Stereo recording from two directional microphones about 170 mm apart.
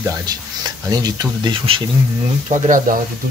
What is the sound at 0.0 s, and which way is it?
Speech, 20° right (ahead or behind).